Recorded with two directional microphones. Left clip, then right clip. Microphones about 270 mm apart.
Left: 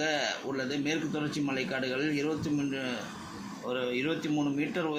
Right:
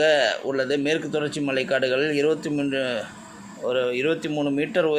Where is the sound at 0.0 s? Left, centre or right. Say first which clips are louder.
Right 11 dB; right.